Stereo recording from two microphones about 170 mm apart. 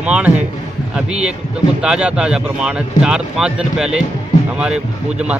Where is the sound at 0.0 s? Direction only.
5° right (ahead or behind).